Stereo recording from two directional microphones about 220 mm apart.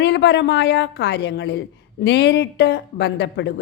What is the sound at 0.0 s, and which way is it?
Speech, 50° left (ahead or behind).